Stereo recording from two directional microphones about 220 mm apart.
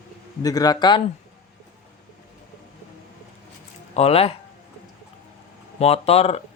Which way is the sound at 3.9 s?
25° left (ahead or behind).